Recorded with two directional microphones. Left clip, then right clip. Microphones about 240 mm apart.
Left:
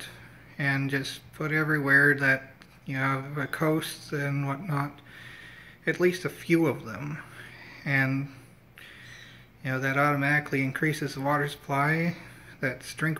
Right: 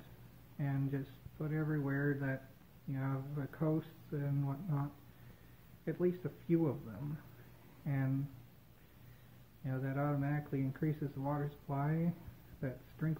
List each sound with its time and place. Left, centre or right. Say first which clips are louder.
0.6 s speech: left 14 dB; centre
9.7 s speech: left 14 dB; left